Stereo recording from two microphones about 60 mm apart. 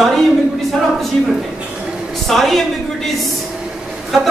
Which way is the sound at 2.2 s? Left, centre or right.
Centre.